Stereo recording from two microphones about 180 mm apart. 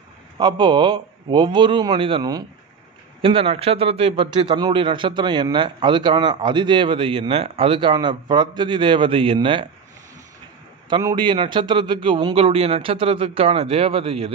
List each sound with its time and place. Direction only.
0.4 s a man's voice: 25° right (ahead or behind)
10.9 s a man's voice: 25° right (ahead or behind)